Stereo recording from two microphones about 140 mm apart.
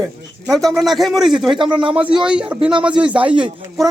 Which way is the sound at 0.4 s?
Centre (ahead or behind).